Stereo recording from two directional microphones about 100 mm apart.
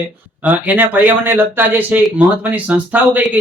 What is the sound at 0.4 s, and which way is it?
Speech, 15° right (ahead or behind).